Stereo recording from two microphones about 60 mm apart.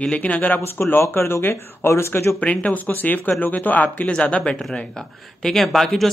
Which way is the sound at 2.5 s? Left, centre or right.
Left.